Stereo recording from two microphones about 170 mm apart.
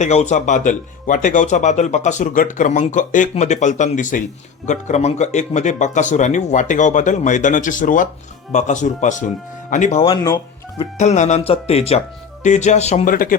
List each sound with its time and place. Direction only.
0.0 s speech: 40° left (ahead or behind)